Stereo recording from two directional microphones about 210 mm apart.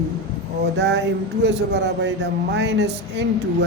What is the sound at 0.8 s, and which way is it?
Speech, 55° right (ahead or behind).